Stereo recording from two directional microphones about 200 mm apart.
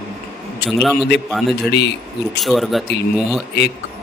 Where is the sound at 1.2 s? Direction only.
Centre (ahead or behind).